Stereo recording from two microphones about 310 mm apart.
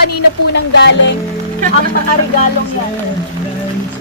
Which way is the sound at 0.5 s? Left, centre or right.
Left.